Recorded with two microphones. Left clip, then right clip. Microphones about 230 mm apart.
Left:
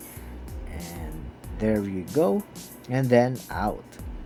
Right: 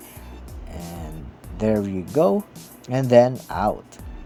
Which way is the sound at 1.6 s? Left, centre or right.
Right.